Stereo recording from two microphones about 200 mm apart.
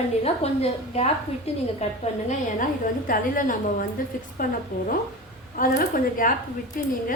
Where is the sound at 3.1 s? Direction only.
45° left (ahead or behind).